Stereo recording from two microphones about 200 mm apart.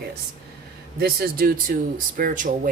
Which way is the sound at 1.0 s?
50° right (ahead or behind).